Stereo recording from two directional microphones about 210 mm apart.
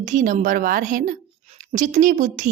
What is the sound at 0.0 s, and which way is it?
A woman's voice, 40° right (ahead or behind).